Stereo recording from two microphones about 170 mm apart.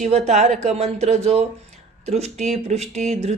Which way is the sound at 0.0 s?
40° right (ahead or behind).